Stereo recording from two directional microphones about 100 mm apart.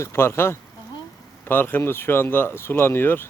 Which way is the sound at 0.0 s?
25° left (ahead or behind).